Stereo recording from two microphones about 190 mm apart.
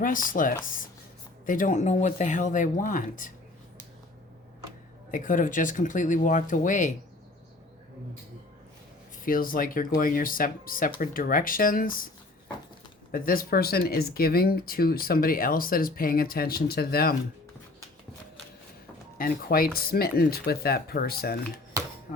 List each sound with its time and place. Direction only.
0.0 s speech: 45° left (ahead or behind)
5.1 s speech: 45° left (ahead or behind)
9.2 s speech: 50° left (ahead or behind)
13.1 s speech: 50° left (ahead or behind)
19.2 s speech: 50° left (ahead or behind)